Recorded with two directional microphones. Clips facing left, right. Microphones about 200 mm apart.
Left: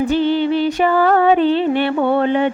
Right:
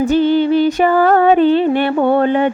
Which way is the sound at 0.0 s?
45° right (ahead or behind).